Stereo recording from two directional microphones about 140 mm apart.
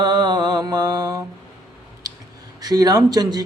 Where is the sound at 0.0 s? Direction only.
30° right (ahead or behind).